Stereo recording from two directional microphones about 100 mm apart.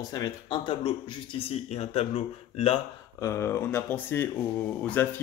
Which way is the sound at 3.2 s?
25° left (ahead or behind).